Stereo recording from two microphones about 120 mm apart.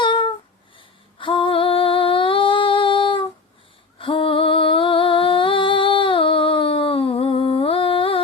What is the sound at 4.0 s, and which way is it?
Music, 45° left (ahead or behind).